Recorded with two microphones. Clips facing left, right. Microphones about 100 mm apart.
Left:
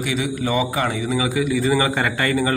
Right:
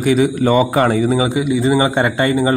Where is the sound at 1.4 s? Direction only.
20° right (ahead or behind).